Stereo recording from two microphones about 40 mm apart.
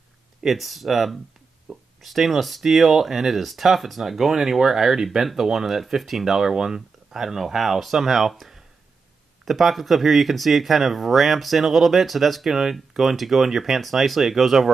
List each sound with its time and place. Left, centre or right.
0.5 s speech: centre